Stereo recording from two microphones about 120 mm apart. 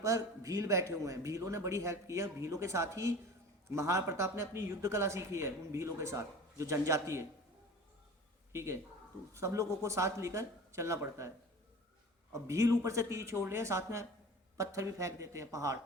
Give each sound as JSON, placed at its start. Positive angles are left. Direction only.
{"t": 0.0, "sound": "speech", "side_deg": -25}
{"t": 8.5, "sound": "speech", "side_deg": -25}
{"t": 12.3, "sound": "speech", "side_deg": -25}